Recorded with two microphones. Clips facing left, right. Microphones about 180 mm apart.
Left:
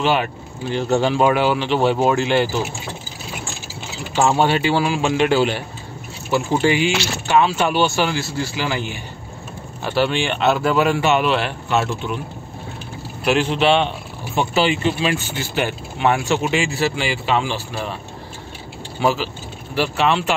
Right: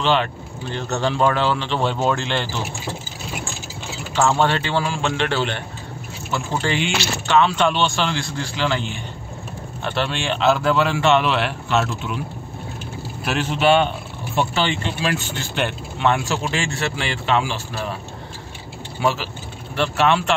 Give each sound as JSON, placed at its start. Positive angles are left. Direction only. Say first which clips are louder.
{"t": 0.0, "sound": "speech", "louder": "left 1 dB", "side_deg": 10}
{"t": 4.1, "sound": "speech", "louder": "left 2 dB", "side_deg": 15}
{"t": 13.2, "sound": "speech", "louder": "left 3 dB", "side_deg": 0}
{"t": 18.9, "sound": "speech", "louder": "left 2 dB", "side_deg": 0}